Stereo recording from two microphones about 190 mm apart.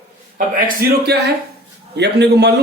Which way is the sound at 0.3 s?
50° right (ahead or behind).